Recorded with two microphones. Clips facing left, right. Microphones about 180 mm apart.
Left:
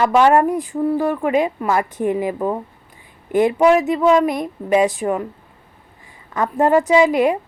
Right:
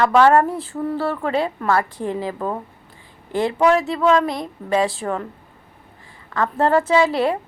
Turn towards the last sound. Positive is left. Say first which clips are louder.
# left 3 dB
turn(degrees=15)  # may be behind; listen again after turning